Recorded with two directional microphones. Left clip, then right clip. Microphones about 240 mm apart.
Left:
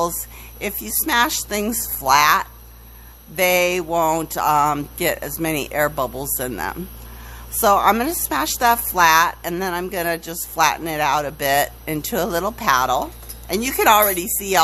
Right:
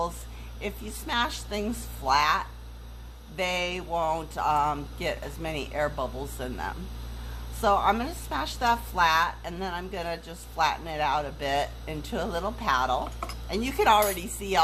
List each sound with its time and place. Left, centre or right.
0.6 s a woman's voice: left